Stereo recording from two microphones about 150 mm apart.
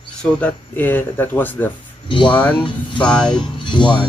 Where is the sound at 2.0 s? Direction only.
35° left (ahead or behind).